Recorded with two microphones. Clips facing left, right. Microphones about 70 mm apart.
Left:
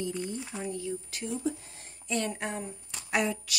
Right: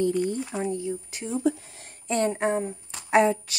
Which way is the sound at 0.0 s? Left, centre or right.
Right.